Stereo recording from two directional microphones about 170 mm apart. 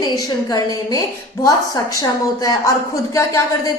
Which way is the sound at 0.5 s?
20° left (ahead or behind).